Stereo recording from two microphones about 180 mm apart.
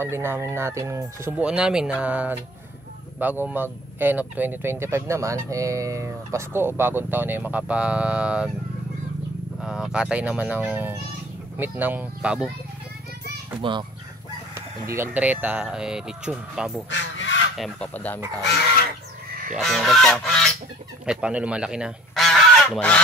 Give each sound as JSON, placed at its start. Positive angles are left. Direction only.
{"t": 0.0, "sound": "speech", "side_deg": -15}
{"t": 9.6, "sound": "speech", "side_deg": -5}
{"t": 13.6, "sound": "a child's voice", "side_deg": -25}
{"t": 14.5, "sound": "speech", "side_deg": -15}
{"t": 16.9, "sound": "crow", "side_deg": 75}
{"t": 17.6, "sound": "speech", "side_deg": 5}
{"t": 19.5, "sound": "speech", "side_deg": 0}
{"t": 21.0, "sound": "goose", "side_deg": -5}